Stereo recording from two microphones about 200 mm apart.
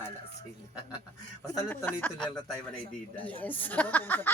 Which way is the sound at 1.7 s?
5° left (ahead or behind).